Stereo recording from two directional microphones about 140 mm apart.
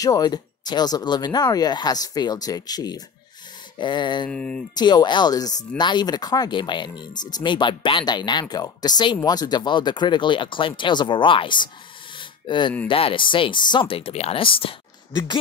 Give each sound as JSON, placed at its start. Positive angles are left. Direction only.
{"t": 0.0, "sound": "speech", "side_deg": 25}
{"t": 4.3, "sound": "speech", "side_deg": 5}
{"t": 4.7, "sound": "speech", "side_deg": 30}
{"t": 12.2, "sound": "a sound", "side_deg": 35}
{"t": 12.8, "sound": "speech", "side_deg": 40}